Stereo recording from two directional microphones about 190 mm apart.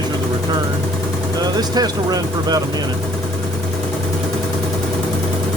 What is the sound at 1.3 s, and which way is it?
Speech, 20° right (ahead or behind).